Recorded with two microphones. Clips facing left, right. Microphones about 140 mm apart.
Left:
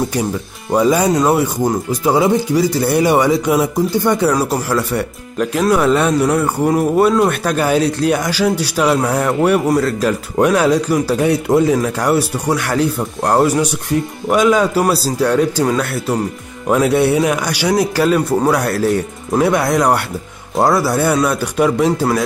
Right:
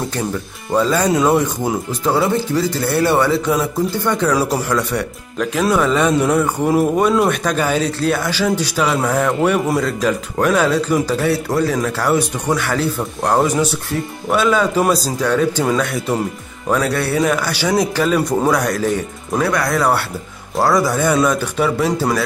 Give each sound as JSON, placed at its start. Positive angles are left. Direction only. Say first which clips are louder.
{"t": 0.7, "sound": "speech", "louder": "left 2 dB", "side_deg": 15}
{"t": 4.4, "sound": "a man's voice", "louder": "left 1 dB", "side_deg": 0}
{"t": 11.7, "sound": "speech", "louder": "left 2 dB", "side_deg": 10}
{"t": 16.6, "sound": "speech", "louder": "left 5 dB", "side_deg": 15}
{"t": 19.4, "sound": "a man's voice", "louder": "left 4 dB", "side_deg": 25}
{"t": 20.7, "sound": "speech", "louder": "left 1 dB", "side_deg": 10}